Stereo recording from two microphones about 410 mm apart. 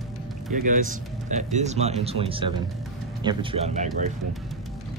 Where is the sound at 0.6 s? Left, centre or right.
Centre.